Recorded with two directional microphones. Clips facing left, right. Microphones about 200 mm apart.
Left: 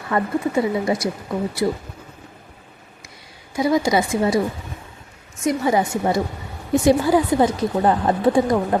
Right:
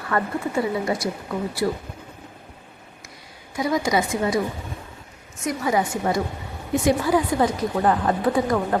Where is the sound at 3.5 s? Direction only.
30° left (ahead or behind).